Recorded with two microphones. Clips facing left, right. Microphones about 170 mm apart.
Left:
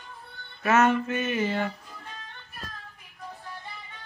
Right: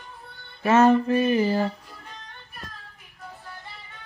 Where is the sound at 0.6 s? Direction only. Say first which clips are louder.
Right 5 dB; 30° right (ahead or behind).